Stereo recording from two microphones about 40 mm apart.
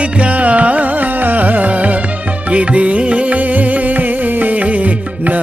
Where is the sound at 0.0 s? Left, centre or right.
Right.